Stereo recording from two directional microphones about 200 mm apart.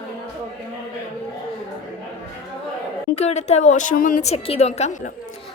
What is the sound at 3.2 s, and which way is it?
A woman's voice, 35° left (ahead or behind).